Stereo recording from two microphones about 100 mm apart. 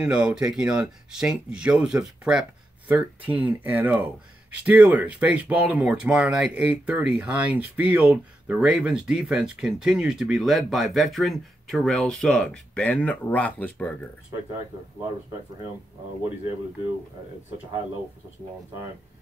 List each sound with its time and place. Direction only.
0.0 s speech: 10° right (ahead or behind); by 13.9 s 15° left (ahead or behind)